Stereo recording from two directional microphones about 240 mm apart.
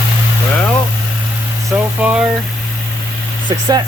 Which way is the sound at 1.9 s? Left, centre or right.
Centre.